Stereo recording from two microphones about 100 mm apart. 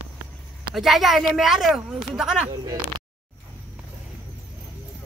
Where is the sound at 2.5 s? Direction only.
40° right (ahead or behind).